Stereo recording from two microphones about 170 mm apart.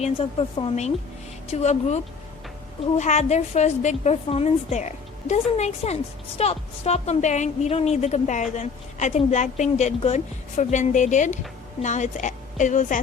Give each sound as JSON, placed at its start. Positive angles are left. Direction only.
{"t": 0.0, "sound": "a woman's voice", "side_deg": 35}
{"t": 3.0, "sound": "a woman's voice", "side_deg": 40}